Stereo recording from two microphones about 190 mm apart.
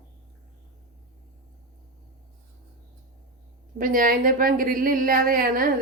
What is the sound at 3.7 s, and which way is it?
A woman's voice, 45° right (ahead or behind).